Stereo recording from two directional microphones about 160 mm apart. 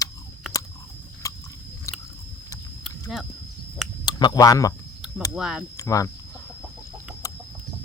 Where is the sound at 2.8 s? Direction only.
Centre (ahead or behind).